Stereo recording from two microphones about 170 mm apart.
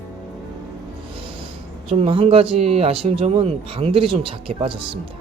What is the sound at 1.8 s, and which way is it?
Speech, 35° right (ahead or behind).